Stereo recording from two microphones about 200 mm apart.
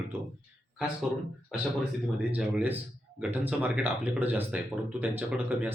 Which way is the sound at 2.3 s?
5° right (ahead or behind).